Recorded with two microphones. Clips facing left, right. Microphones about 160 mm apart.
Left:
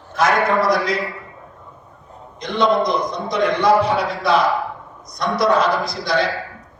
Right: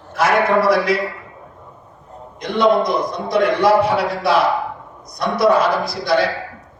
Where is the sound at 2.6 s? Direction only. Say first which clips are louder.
Right 2 dB; 5° right (ahead or behind).